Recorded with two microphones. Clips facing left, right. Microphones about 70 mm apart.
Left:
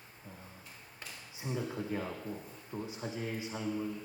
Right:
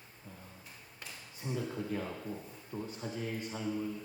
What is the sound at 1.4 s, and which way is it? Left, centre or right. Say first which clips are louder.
A man's voice: even; centre.